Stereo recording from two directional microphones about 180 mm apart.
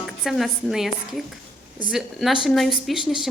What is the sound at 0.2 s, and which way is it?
A woman's voice, centre (ahead or behind).